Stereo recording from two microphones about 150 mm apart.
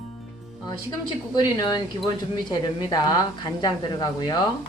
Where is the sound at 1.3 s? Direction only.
30° left (ahead or behind).